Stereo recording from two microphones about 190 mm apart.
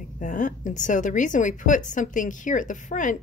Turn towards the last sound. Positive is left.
turn(degrees=40)  # may be behind; listen again after turning